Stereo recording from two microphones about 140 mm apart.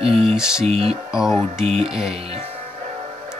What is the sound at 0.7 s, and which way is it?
Speech, 45° right (ahead or behind).